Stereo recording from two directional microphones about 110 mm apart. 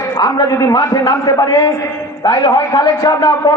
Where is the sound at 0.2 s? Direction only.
35° left (ahead or behind).